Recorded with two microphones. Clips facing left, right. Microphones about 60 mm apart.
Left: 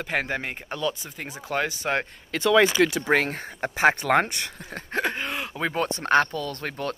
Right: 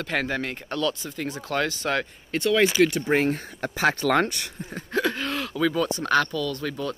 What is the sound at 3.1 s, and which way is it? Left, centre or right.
Speech, left.